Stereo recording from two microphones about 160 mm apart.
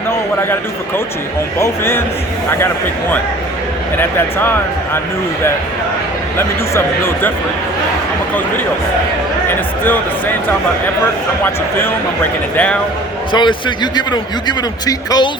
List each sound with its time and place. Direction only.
1.5 s speech: 15° left (ahead or behind)
6.7 s speech: 15° left (ahead or behind)
11.4 s speech: 15° left (ahead or behind)
13.3 s a man's voice: 30° left (ahead or behind)